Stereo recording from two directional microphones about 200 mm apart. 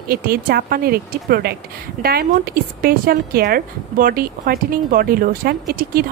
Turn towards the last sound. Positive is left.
turn(degrees=-45)  # may be behind; listen again after turning